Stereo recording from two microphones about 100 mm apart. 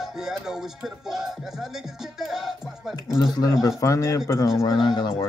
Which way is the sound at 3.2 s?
40° left (ahead or behind).